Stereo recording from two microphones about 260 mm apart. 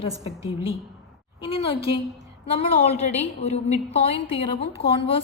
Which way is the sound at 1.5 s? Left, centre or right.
Left.